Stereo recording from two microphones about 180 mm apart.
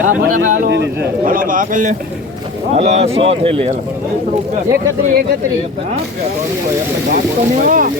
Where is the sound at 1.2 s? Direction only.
50° right (ahead or behind); by 3.7 s 30° right (ahead or behind).